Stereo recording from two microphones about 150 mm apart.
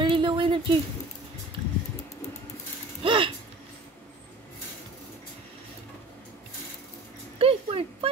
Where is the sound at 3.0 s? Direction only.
35° right (ahead or behind).